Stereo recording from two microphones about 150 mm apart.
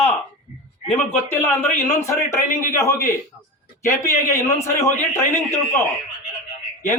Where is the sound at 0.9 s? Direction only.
15° left (ahead or behind).